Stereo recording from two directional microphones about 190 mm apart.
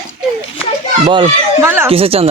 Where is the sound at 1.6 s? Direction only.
10° right (ahead or behind).